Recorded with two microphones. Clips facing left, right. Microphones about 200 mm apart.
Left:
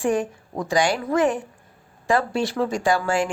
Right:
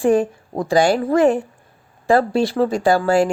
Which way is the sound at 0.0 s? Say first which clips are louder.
Right 6 dB; 35° right (ahead or behind).